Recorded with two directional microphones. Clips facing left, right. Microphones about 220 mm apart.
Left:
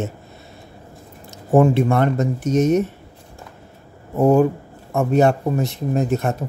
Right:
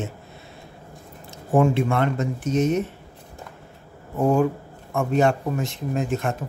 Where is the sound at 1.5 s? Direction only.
40° left (ahead or behind).